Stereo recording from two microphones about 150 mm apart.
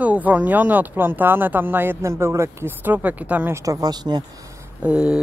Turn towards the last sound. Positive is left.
turn(degrees=-5)  # may be behind; listen again after turning